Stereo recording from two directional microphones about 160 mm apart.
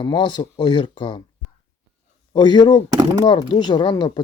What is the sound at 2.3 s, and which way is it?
Speech, 25° left (ahead or behind).